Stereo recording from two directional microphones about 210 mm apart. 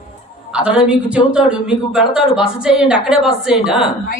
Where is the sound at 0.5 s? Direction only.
5° right (ahead or behind).